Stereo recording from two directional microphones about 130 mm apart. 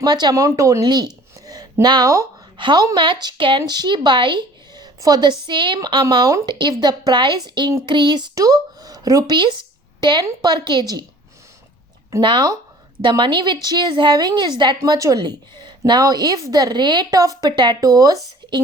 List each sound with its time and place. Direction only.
0.0 s a woman's voice: 35° right (ahead or behind)
12.2 s a woman's voice: 35° right (ahead or behind)
14.8 s a woman's voice: 25° right (ahead or behind)